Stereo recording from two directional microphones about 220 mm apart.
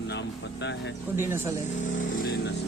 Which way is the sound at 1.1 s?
10° right (ahead or behind).